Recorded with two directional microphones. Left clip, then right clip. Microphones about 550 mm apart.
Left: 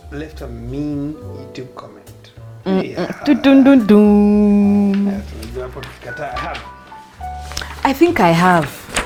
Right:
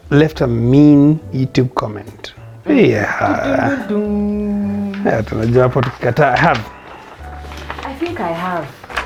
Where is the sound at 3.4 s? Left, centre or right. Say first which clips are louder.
Left 6 dB; left.